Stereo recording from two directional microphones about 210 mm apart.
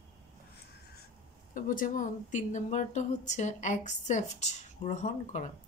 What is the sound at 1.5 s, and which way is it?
Speech, 40° left (ahead or behind).